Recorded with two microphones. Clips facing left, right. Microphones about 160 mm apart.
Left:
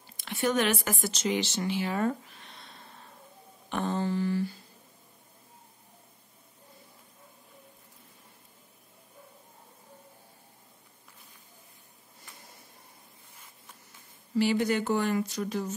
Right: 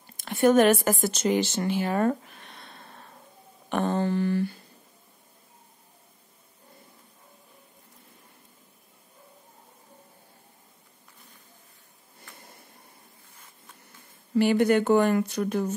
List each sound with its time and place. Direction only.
0.0 s speech: 50° right (ahead or behind)
14.3 s speech: 55° right (ahead or behind)